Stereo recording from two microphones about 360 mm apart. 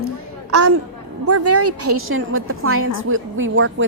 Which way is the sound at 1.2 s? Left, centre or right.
Right.